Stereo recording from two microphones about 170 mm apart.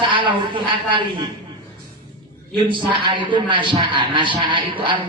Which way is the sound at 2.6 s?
30° right (ahead or behind).